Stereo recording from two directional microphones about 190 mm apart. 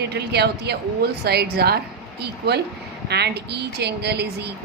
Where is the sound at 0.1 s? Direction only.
60° right (ahead or behind).